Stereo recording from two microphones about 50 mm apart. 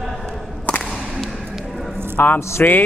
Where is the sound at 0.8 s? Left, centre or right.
Centre.